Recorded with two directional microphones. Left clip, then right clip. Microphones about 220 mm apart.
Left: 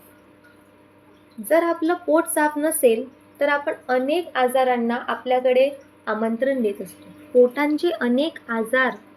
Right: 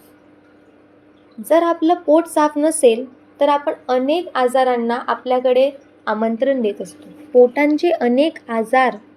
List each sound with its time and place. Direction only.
1.5 s speech: 15° right (ahead or behind)